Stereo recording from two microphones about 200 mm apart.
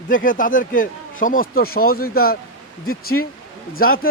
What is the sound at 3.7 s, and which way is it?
Speech, 45° left (ahead or behind).